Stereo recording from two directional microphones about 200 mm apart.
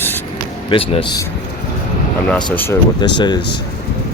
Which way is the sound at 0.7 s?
25° left (ahead or behind).